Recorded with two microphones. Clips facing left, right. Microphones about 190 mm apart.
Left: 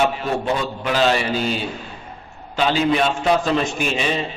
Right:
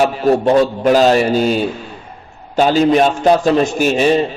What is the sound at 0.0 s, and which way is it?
A man's voice, 40° right (ahead or behind).